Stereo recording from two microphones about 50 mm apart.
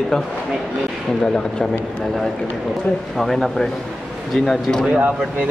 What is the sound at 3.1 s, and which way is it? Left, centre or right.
Speech, centre.